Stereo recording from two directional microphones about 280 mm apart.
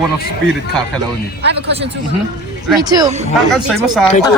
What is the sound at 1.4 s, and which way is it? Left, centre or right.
Speech, right.